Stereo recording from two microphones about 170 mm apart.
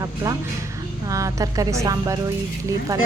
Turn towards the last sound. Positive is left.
turn(degrees=-20)  # may be behind; listen again after turning